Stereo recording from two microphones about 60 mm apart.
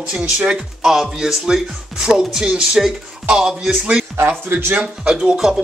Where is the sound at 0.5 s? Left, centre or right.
Centre.